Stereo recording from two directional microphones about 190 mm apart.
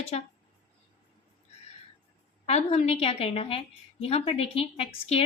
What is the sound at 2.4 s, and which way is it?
A woman's voice, 35° left (ahead or behind).